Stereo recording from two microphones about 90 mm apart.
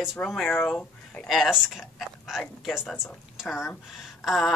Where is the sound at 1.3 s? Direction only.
5° right (ahead or behind).